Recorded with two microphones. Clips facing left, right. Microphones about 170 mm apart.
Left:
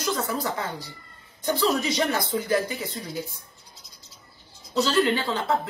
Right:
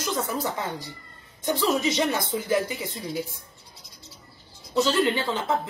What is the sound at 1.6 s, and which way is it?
A man's voice, 20° right (ahead or behind).